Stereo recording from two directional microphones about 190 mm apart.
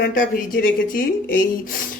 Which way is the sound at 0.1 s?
45° left (ahead or behind).